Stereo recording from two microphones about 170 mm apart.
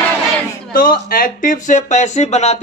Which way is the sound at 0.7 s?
55° left (ahead or behind).